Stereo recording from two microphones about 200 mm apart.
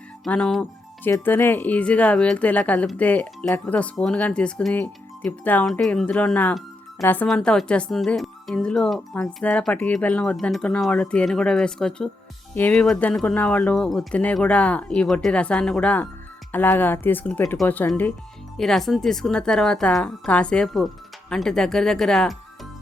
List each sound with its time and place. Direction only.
0.3 s speech: 5° left (ahead or behind)